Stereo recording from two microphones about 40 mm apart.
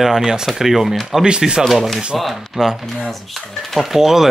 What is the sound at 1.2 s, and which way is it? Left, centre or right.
Speech, right.